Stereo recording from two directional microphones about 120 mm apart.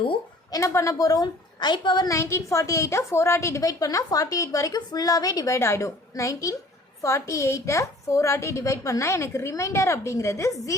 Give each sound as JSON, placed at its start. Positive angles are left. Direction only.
{"t": 0.5, "sound": "a woman's voice", "side_deg": 25}
{"t": 2.0, "sound": "a woman's voice", "side_deg": 25}